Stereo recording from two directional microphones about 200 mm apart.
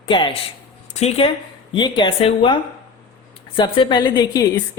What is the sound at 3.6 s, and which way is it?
A woman's voice, 25° left (ahead or behind).